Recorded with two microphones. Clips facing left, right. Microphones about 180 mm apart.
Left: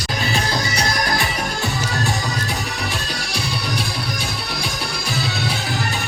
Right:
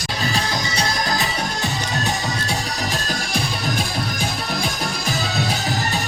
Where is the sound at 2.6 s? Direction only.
40° right (ahead or behind).